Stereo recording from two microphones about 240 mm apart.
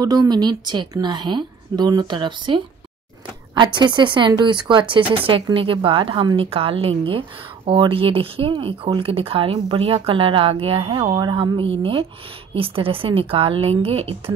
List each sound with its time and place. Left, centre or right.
0.0 s a woman's voice: centre